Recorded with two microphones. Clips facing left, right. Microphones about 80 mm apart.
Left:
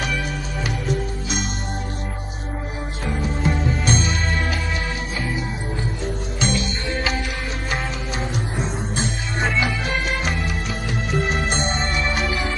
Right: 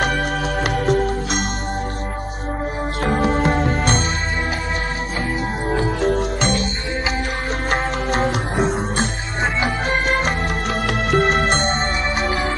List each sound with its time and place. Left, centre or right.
0.0 s music: right
3.1 s music: right
5.7 s music: right
6.0 s music: right
7.7 s music: right